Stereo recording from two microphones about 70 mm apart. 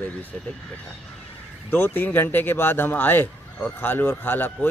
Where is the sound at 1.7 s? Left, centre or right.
Left.